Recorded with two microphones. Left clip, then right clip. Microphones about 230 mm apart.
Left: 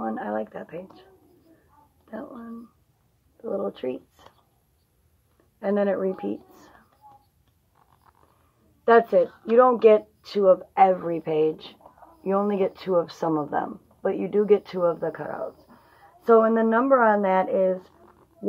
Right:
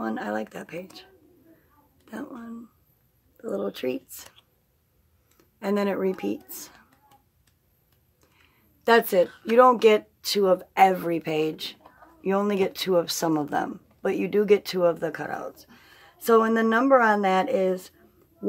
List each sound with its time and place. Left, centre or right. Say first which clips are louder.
0.0 s speech: left 1 dB; right
2.0 s a sound: even; right
3.4 s speech: even; right
5.6 s speech: left 2 dB; right
8.8 s speech: left 2 dB; right
9.2 s speech: even; centre
9.6 s speech: left 1 dB; right